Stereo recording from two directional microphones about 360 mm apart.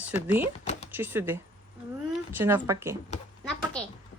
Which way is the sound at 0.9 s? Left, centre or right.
Centre.